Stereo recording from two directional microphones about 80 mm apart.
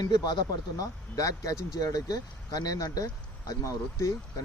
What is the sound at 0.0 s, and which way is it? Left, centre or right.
A man's voice, left.